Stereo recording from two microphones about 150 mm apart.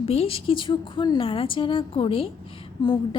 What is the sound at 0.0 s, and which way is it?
A woman's voice, 40° left (ahead or behind).